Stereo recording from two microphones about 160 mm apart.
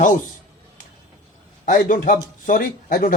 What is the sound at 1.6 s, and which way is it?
A man's voice, 55° left (ahead or behind).